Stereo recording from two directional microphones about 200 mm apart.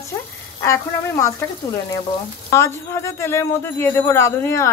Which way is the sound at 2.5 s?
15° left (ahead or behind).